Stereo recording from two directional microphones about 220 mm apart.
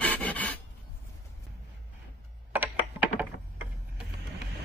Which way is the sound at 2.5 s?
5° right (ahead or behind).